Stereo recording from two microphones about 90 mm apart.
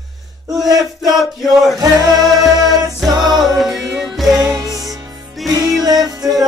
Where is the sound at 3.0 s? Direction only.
50° right (ahead or behind).